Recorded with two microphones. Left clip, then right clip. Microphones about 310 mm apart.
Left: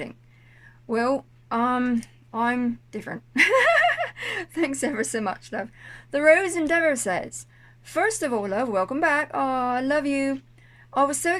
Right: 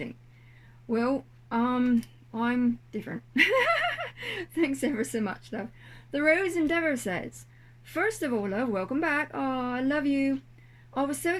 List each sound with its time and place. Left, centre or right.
0.9 s speech: left